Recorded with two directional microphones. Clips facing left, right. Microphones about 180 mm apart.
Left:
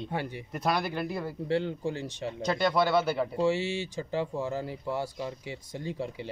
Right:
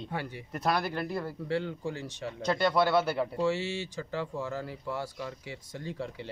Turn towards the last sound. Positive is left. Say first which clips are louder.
# left 3 dB
turn(degrees=15)  # may be behind; listen again after turning